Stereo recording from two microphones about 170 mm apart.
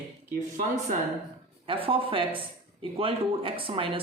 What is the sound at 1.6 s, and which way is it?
Speech, 30° right (ahead or behind).